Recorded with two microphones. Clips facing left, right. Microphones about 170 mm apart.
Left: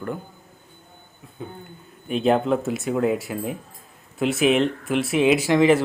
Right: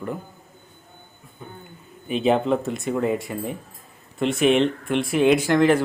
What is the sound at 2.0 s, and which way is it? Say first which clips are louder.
Speech: even; centre (ahead or behind).